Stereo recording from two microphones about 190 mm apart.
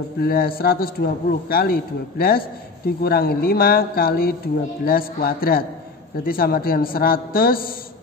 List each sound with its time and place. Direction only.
0.2 s a man's voice: 50° left (ahead or behind)